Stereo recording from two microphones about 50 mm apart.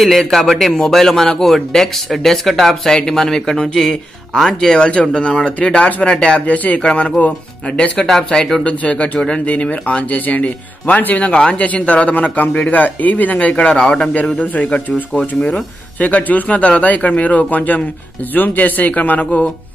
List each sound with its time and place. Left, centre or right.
0.0 s a man's voice: centre; by 8.1 s left
8.1 s speech: centre
8.6 s speech: left
14.4 s speech: left